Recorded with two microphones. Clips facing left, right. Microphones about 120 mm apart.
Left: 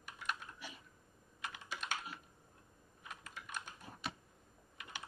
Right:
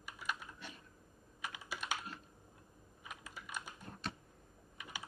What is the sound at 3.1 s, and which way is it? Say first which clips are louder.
Typing: even; 5° right (ahead or behind).